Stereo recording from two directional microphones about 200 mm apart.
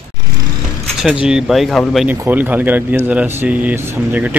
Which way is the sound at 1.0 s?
5° right (ahead or behind).